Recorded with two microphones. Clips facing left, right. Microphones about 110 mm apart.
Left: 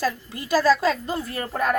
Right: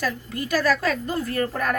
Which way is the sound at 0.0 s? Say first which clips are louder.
Left 1 dB; 30° left (ahead or behind).